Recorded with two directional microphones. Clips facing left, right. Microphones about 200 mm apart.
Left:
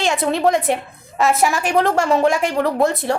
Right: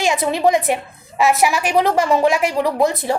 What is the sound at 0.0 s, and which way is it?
A woman's voice, centre (ahead or behind).